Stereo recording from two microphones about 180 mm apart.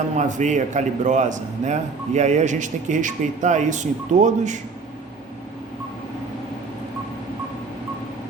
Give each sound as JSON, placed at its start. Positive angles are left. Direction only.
{"t": 0.2, "sound": "a man's voice", "side_deg": -40}